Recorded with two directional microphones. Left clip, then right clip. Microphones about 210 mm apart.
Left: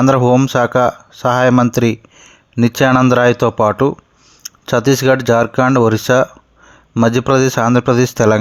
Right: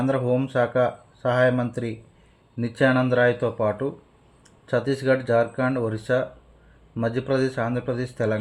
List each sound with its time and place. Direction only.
0.0 s speech: 40° left (ahead or behind)